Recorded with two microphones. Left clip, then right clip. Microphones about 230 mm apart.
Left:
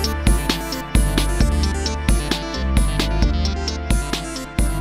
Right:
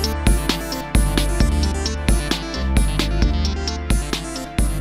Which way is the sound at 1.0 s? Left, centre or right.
Centre.